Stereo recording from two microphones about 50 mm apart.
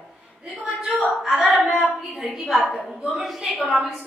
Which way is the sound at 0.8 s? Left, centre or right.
Centre.